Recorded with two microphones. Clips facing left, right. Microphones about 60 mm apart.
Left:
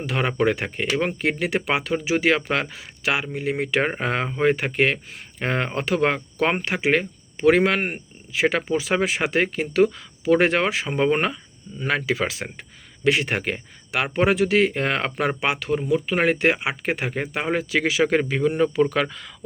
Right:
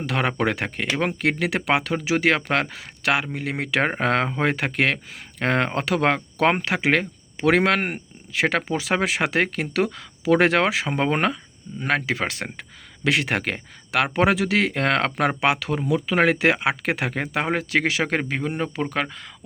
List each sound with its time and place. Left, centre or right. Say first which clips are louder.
0.0 s speech: left 1 dB; right
5.4 s speech: right 2 dB; right
11.8 s speech: even; right
13.1 s speech: left 1 dB; right
15.4 s speech: right 1 dB; right
17.3 s speech: right 1 dB; right